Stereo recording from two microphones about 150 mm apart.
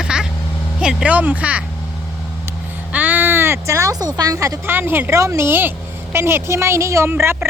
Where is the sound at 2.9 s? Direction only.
10° right (ahead or behind).